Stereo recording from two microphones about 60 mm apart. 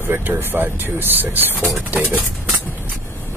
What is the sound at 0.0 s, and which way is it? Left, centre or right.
Speech, right.